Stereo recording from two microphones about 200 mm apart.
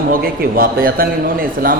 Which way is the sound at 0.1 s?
45° right (ahead or behind).